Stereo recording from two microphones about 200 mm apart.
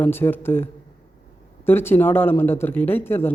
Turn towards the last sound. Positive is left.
turn(degrees=10)  # may be behind; listen again after turning